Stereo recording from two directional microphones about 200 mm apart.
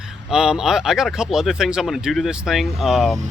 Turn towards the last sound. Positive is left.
turn(degrees=0)  # may be behind; listen again after turning